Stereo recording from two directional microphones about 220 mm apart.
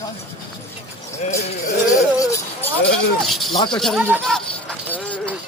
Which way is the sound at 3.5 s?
20° left (ahead or behind).